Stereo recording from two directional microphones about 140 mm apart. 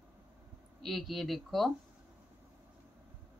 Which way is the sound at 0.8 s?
Centre (ahead or behind).